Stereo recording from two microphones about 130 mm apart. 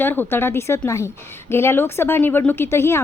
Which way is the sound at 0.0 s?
15° left (ahead or behind).